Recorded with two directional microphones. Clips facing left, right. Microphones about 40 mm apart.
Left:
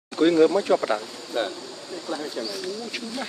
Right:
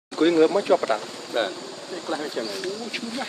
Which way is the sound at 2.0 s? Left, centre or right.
Right.